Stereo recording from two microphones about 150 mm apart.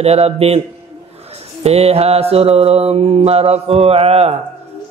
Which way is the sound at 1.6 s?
45° right (ahead or behind).